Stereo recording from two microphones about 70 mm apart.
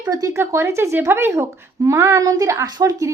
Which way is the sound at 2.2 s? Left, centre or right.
Right.